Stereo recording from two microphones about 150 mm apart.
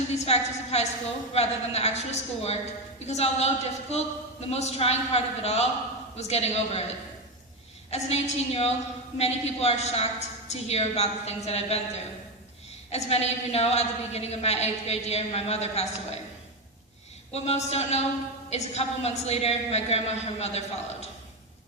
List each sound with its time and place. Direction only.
0.2 s a woman's voice: 45° left (ahead or behind)
7.9 s a woman's voice: 45° left (ahead or behind)
12.9 s a woman's voice: 45° left (ahead or behind)
17.3 s a woman's voice: 45° left (ahead or behind)